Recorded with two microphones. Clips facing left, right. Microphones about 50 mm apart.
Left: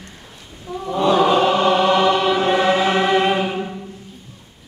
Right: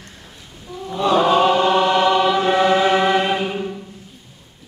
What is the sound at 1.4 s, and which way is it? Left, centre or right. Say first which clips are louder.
Choir: even; centre.